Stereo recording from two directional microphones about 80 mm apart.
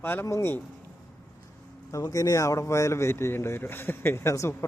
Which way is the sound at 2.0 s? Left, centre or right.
Left.